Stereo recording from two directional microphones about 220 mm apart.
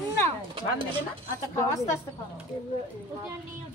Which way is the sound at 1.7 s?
15° left (ahead or behind).